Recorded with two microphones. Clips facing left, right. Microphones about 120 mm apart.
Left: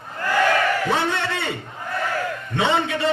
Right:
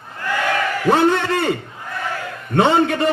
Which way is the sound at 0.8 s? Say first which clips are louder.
Right 7 dB; 50° right (ahead or behind).